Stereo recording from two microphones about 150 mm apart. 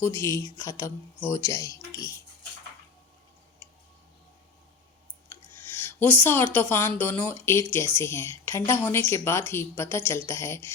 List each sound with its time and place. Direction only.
0.0 s speech: 15° left (ahead or behind)
5.3 s speech: 15° left (ahead or behind)